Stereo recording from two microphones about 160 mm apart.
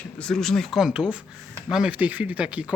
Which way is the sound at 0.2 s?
5° left (ahead or behind).